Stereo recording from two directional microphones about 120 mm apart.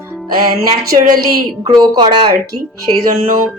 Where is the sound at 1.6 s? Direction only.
40° right (ahead or behind).